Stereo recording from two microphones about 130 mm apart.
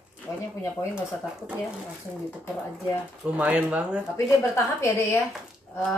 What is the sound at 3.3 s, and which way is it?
Speech, 10° right (ahead or behind).